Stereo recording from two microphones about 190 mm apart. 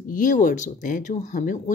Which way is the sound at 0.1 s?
40° left (ahead or behind).